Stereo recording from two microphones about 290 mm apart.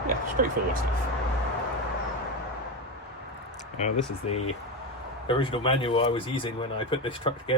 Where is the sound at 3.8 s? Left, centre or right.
Left.